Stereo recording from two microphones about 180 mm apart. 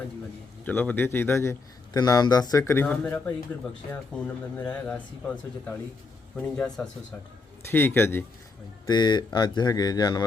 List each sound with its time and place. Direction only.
0.6 s a man's voice: 10° left (ahead or behind)
4.5 s a man's voice: 10° left (ahead or behind)
8.9 s speech: 25° left (ahead or behind)